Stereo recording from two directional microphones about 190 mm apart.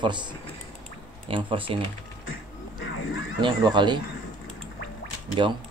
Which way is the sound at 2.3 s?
90° left.